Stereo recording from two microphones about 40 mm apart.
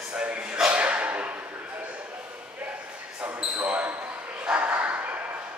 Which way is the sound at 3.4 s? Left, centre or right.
Right.